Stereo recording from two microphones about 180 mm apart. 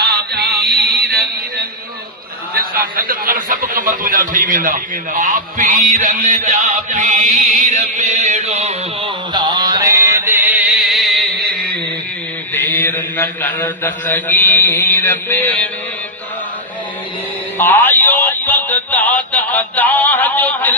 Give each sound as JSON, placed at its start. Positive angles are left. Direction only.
{"t": 0.0, "sound": "chant", "side_deg": -65}
{"t": 2.7, "sound": "a man's voice", "side_deg": -50}
{"t": 9.3, "sound": "mantra", "side_deg": -25}
{"t": 12.5, "sound": "mantra", "side_deg": 10}
{"t": 17.6, "sound": "a sound", "side_deg": 10}